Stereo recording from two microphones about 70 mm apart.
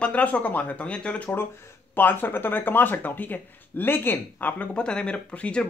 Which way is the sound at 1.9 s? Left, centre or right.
Left.